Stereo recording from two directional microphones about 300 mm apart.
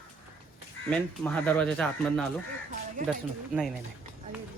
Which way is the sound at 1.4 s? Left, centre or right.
Centre.